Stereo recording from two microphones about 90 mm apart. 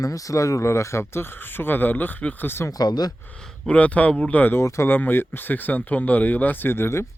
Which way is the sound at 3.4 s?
10° left (ahead or behind).